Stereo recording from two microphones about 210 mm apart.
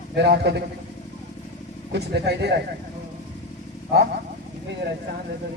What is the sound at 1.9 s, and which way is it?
Speech, 50° right (ahead or behind).